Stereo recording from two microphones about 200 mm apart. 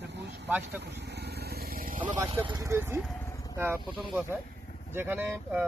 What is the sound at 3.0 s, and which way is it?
Vehicle, centre (ahead or behind).